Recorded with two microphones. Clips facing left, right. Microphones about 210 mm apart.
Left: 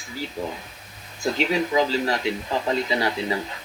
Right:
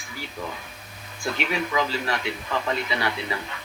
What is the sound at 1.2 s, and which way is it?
A man's voice, 30° left (ahead or behind).